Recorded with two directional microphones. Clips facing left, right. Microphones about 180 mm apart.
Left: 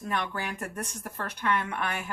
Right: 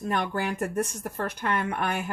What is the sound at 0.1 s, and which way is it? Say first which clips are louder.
Speech: right 4 dB; 50° right (ahead or behind).